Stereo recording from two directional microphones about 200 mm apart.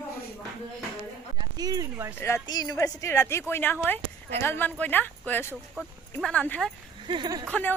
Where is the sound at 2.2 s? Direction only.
15° left (ahead or behind).